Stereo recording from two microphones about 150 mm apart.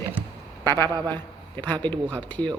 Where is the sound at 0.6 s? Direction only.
15° left (ahead or behind).